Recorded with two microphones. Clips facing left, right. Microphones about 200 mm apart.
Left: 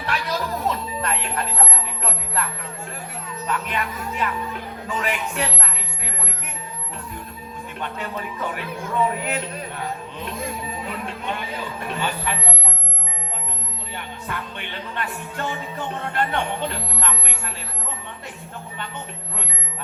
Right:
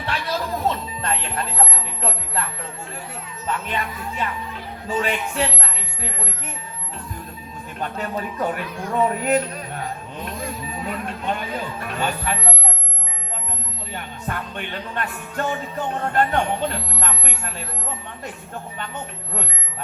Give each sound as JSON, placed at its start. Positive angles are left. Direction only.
{"t": 0.0, "sound": "music", "side_deg": -30}
{"t": 2.0, "sound": "speech", "side_deg": -30}
{"t": 7.8, "sound": "music", "side_deg": -40}
{"t": 9.2, "sound": "a sound", "side_deg": -45}
{"t": 10.9, "sound": "music", "side_deg": -50}
{"t": 13.9, "sound": "music", "side_deg": -50}